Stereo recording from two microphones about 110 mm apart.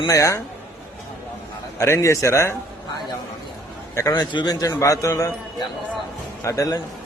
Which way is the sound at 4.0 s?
30° left (ahead or behind).